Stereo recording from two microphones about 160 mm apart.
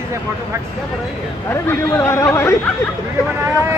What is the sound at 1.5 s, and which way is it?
Speech, 15° left (ahead or behind).